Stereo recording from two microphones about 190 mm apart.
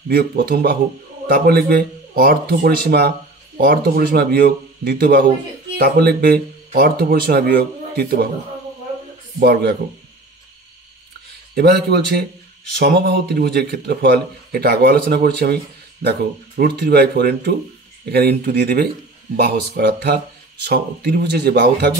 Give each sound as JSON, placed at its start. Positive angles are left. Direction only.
{"t": 0.1, "sound": "a man's voice", "side_deg": -50}
{"t": 9.4, "sound": "a man's voice", "side_deg": -55}
{"t": 11.5, "sound": "a man's voice", "side_deg": -60}